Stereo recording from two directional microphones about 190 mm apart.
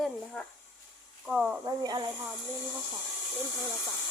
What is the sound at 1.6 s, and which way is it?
Speech, 20° right (ahead or behind).